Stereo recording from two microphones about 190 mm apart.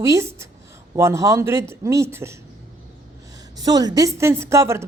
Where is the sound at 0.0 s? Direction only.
15° right (ahead or behind).